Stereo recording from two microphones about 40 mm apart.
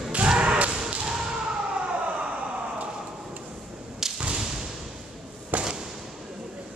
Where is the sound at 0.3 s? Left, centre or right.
Right.